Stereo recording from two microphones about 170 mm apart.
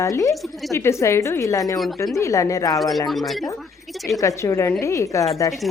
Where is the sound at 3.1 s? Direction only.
Centre (ahead or behind).